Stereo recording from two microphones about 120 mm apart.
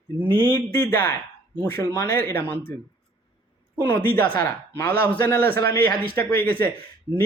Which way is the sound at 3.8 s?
15° left (ahead or behind).